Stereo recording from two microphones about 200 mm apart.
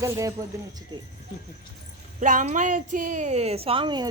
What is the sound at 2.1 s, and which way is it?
A woman's voice, 40° right (ahead or behind).